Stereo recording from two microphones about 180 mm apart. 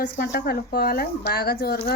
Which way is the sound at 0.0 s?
70° left (ahead or behind).